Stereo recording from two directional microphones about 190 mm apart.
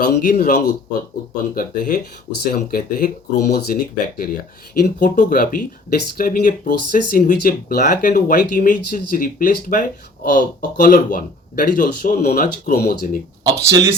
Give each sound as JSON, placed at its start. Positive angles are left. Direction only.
{"t": 0.0, "sound": "speech", "side_deg": 45}
{"t": 13.4, "sound": "speech", "side_deg": -15}